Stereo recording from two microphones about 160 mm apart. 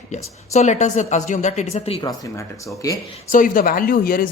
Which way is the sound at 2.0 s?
20° left (ahead or behind).